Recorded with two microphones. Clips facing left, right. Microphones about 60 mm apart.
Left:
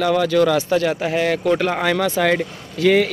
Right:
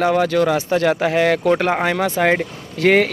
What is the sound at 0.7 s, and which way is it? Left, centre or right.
Speech, right.